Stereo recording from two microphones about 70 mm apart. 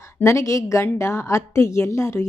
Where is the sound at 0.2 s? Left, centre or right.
Left.